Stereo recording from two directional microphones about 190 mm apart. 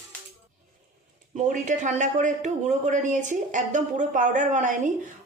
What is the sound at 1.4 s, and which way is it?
A woman's voice, 40° right (ahead or behind).